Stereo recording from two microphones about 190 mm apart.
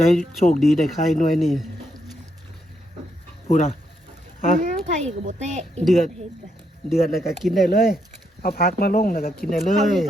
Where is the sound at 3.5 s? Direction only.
40° left (ahead or behind).